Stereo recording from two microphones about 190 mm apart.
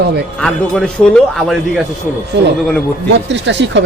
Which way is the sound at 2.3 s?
65° right (ahead or behind).